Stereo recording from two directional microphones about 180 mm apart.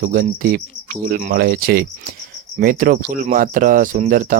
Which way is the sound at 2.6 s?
50° right (ahead or behind).